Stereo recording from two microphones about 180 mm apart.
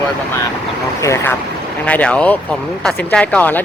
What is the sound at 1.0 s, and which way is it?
Speech, 15° left (ahead or behind).